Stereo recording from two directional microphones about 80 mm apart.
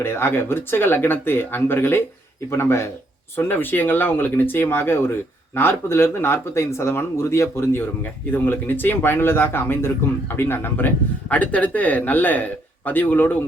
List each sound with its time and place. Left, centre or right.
0.0 s speech: left